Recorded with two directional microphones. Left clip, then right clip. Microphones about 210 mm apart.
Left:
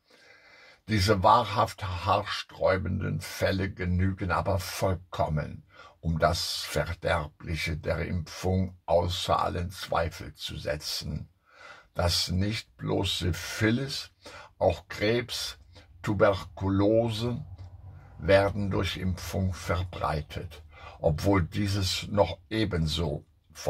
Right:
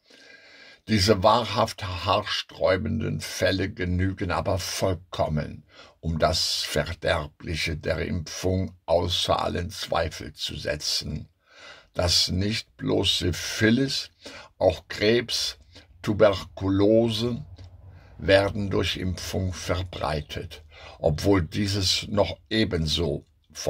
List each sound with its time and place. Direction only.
0.6 s speech: 35° right (ahead or behind)